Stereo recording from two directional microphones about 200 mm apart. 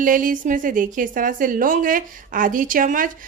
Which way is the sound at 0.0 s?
40° right (ahead or behind).